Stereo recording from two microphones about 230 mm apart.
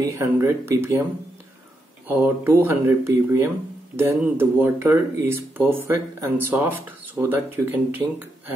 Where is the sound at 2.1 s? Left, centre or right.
Centre.